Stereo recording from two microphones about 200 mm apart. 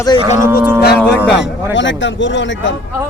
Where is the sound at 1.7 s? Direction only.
65° left (ahead or behind).